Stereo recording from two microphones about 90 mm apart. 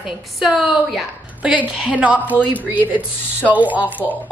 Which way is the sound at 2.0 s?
15° right (ahead or behind).